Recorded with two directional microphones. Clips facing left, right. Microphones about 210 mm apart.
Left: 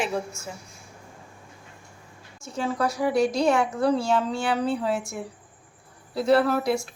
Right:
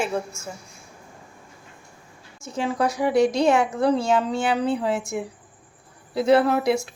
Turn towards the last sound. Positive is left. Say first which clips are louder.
# right 2 dB
turn(degrees=0)  # may be behind; listen again after turning